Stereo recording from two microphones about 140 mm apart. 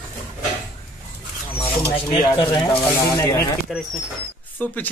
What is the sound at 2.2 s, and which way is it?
Speech, 25° left (ahead or behind).